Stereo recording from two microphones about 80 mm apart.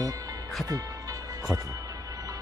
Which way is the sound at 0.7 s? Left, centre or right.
Right.